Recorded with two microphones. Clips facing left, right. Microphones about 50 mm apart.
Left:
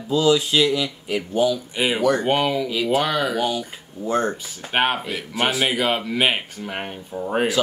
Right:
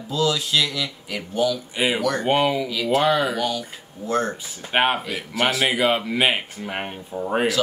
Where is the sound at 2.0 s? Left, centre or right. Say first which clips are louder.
Left 4 dB; centre.